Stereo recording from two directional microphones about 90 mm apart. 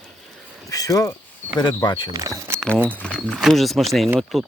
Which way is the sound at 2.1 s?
35° right (ahead or behind).